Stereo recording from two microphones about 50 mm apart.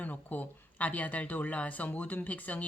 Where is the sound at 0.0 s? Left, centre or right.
Left.